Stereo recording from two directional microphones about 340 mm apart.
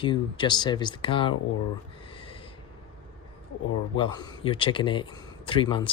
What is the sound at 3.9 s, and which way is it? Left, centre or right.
A man's voice, centre.